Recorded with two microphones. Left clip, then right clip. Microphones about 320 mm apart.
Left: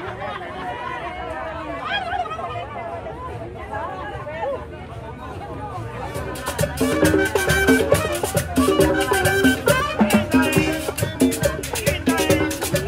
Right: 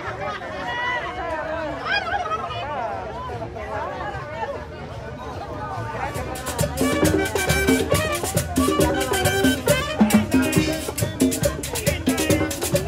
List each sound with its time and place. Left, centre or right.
6.6 s music: centre